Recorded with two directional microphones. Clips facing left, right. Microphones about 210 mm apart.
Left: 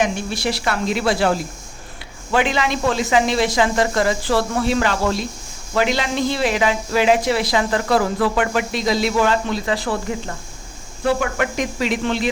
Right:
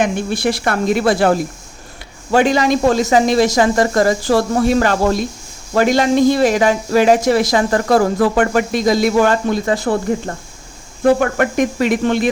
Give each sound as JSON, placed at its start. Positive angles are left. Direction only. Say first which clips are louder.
{"t": 0.0, "sound": "speech", "louder": "right 4 dB", "side_deg": -55}